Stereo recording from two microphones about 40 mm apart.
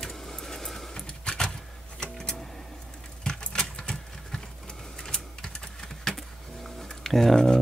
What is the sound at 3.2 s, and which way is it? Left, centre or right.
Keys jangling, centre.